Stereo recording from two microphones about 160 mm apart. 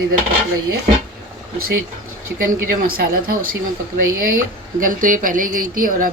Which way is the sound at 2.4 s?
60° right (ahead or behind).